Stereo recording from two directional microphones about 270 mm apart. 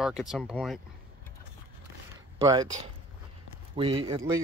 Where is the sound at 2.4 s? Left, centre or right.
Centre.